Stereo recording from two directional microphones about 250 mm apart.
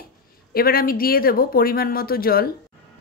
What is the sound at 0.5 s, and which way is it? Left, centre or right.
A woman's voice, left.